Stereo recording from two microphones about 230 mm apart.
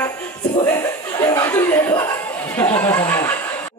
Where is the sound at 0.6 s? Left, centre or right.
Centre.